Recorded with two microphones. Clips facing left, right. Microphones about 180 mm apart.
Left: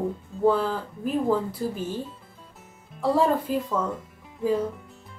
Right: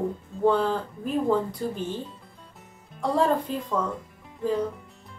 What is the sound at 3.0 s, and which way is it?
Speech, centre (ahead or behind).